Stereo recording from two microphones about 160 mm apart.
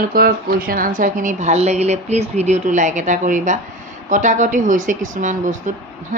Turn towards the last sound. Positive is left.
turn(degrees=-50)  # may be behind; listen again after turning